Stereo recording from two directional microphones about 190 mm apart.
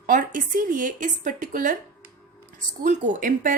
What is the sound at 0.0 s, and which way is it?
A woman's voice, 45° right (ahead or behind).